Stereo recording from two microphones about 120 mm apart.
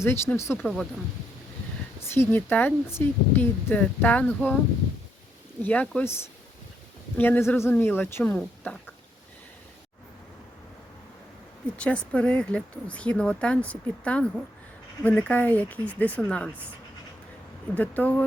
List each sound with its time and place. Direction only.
0.0 s speech: 20° left (ahead or behind)
2.1 s speech: 15° left (ahead or behind)
5.6 s speech: 10° left (ahead or behind)
7.2 s speech: 20° left (ahead or behind)
11.8 s speech: 10° left (ahead or behind)
17.7 s speech: 15° left (ahead or behind)